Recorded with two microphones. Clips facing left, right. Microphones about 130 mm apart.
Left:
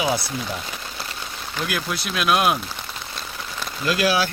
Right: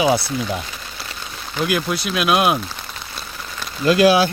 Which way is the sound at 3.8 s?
25° right (ahead or behind).